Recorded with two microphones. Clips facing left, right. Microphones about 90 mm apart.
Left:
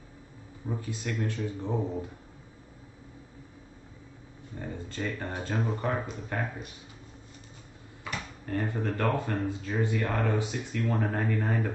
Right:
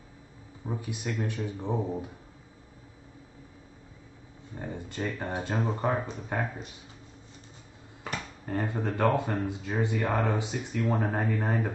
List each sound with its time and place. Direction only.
0.7 s speech: 15° right (ahead or behind)
4.6 s speech: 20° right (ahead or behind)
8.5 s speech: 15° right (ahead or behind)